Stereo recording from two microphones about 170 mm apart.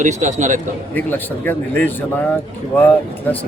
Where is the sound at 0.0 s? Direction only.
45° right (ahead or behind).